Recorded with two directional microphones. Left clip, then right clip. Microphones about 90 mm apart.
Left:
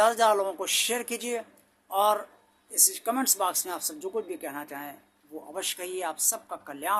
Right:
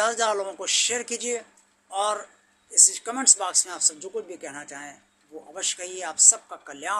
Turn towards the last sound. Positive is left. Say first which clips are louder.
# even
turn(degrees=30)  # may be behind; listen again after turning